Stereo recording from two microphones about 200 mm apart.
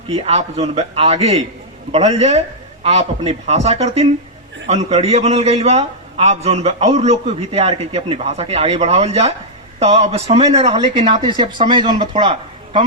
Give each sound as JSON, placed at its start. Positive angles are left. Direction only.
{"t": 0.1, "sound": "a man's voice", "side_deg": -30}